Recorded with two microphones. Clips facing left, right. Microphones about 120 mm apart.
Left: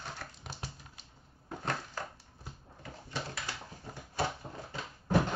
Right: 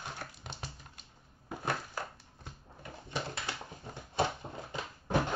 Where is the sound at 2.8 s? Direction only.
20° right (ahead or behind).